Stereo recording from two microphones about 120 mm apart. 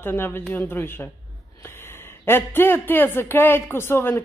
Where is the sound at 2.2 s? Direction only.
20° left (ahead or behind).